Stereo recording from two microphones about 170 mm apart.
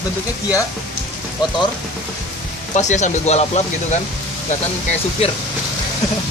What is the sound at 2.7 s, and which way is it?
Speech, 45° left (ahead or behind).